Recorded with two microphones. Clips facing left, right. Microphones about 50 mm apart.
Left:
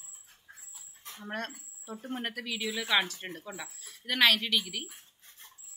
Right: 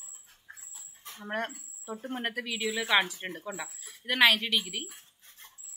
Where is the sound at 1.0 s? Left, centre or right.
Centre.